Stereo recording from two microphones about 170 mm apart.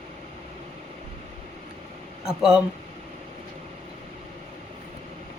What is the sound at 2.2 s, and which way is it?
Speech, 5° right (ahead or behind).